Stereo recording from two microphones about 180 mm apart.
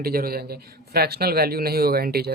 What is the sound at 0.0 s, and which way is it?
Speech, 55° right (ahead or behind).